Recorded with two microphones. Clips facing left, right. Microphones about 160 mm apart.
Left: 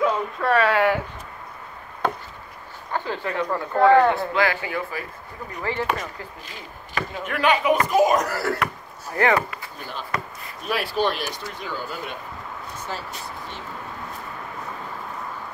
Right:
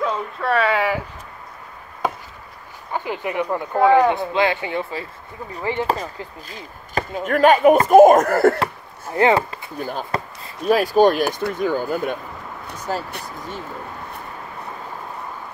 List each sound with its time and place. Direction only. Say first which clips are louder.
0.0 s a sound: left 1 dB; centre (ahead or behind)
2.9 s speech: right 2 dB; 15° right (ahead or behind)
5.9 s speech: right 4 dB; 35° right (ahead or behind)
7.0 s speech: right 8 dB; 45° right (ahead or behind)
9.1 s speech: right 4 dB; 25° right (ahead or behind)
10.1 s speech: right 4 dB; 35° right (ahead or behind)